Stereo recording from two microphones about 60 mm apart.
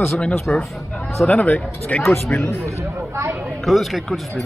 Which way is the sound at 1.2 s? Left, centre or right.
Left.